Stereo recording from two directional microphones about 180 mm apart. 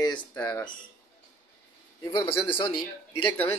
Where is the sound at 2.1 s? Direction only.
30° left (ahead or behind).